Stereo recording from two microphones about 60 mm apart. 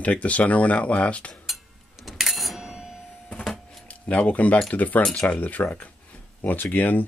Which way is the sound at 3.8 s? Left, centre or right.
Left.